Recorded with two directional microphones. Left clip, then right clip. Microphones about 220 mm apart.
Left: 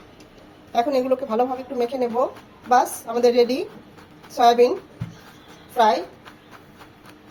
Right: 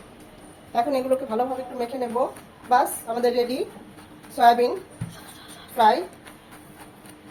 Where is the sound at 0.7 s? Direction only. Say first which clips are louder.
Left 2 dB; 20° left (ahead or behind).